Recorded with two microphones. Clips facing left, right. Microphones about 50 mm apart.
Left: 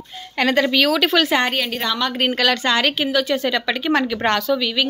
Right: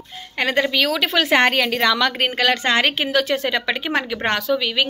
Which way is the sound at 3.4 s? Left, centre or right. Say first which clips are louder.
Left 2 dB; right.